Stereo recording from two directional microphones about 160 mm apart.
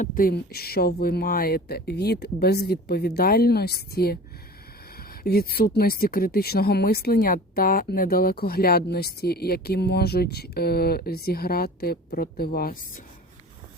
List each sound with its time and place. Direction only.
0.0 s speech: 60° left (ahead or behind)